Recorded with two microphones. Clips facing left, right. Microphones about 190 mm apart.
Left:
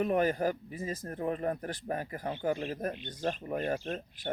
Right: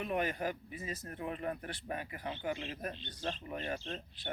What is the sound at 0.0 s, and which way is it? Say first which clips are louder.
Speech: left 7 dB; 40° left (ahead or behind).